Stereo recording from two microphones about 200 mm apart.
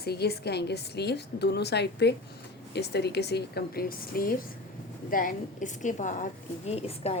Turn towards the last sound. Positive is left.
turn(degrees=30)  # may be behind; listen again after turning